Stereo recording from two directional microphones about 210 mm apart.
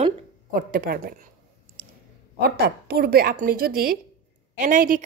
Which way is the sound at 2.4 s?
50° right (ahead or behind).